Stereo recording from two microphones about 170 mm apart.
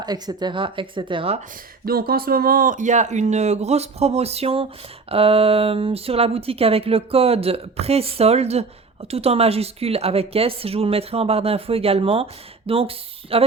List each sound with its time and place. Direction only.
0.0 s speech: 25° right (ahead or behind)
1.8 s speech: 65° right (ahead or behind); by 13.4 s 35° right (ahead or behind)